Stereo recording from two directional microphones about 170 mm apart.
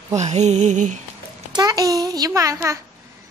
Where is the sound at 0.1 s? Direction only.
40° right (ahead or behind).